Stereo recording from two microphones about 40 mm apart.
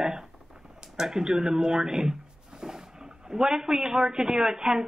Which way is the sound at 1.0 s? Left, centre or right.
Centre.